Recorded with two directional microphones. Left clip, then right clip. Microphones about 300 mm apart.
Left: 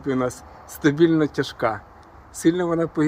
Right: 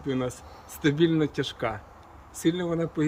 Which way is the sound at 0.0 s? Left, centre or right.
Centre.